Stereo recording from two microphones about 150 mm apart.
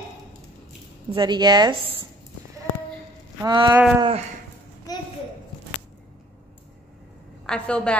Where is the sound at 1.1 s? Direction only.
30° right (ahead or behind).